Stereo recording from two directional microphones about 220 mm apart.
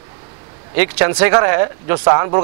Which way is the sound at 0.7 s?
15° right (ahead or behind).